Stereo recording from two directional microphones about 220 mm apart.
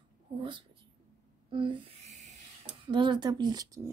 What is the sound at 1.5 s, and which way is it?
Owl, 20° right (ahead or behind).